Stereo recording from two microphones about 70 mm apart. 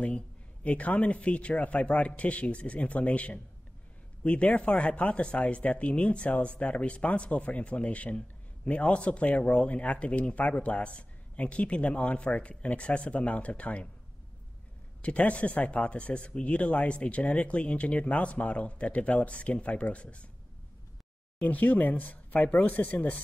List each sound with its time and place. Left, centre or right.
0.7 s speech: centre
15.0 s speech: centre
21.4 s speech: left